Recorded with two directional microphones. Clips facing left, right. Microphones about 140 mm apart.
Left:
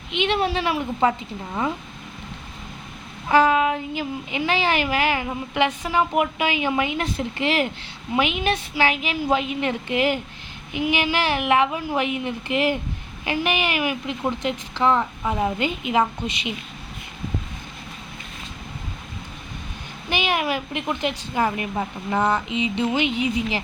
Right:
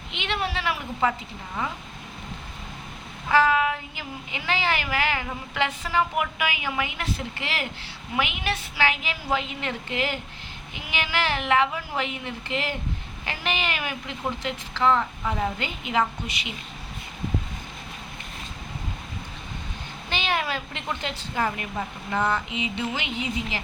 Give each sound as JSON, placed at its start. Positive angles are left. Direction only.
{"t": 0.1, "sound": "a woman's voice", "side_deg": 20}
{"t": 3.2, "sound": "a woman's voice", "side_deg": 20}
{"t": 20.1, "sound": "a woman's voice", "side_deg": 15}